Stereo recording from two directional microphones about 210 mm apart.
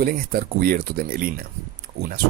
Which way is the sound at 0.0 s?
45° right (ahead or behind).